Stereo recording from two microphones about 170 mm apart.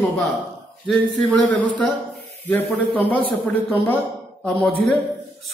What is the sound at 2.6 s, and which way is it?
A man's voice, 10° left (ahead or behind).